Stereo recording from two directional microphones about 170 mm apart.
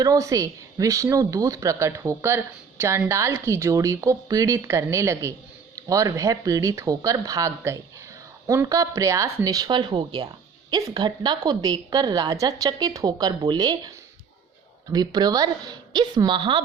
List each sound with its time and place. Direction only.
0.0 s a woman's voice: 20° right (ahead or behind)
14.9 s a woman's voice: 25° right (ahead or behind)